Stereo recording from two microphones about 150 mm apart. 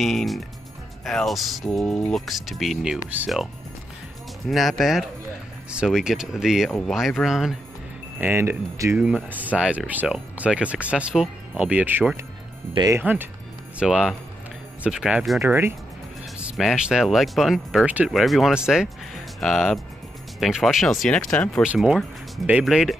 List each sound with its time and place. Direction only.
0.0 s speech: centre (ahead or behind)
4.5 s speech: centre (ahead or behind)
8.2 s speech: 15° right (ahead or behind)
12.7 s speech: 25° right (ahead or behind)
13.0 s speech: 10° right (ahead or behind)
15.4 s speech: 15° right (ahead or behind)
16.3 s speech: 5° right (ahead or behind)
21.6 s speech: 5° right (ahead or behind)